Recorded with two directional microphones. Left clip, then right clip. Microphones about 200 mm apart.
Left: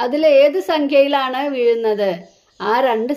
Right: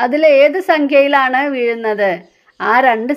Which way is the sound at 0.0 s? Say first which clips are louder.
Right 3 dB; 20° right (ahead or behind).